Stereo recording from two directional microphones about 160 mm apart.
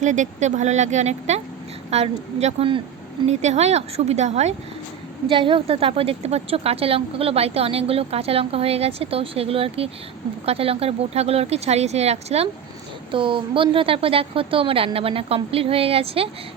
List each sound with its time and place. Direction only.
0.0 s a woman's voice: 50° right (ahead or behind)